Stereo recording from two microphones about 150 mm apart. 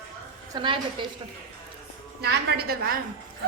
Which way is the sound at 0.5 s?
35° right (ahead or behind).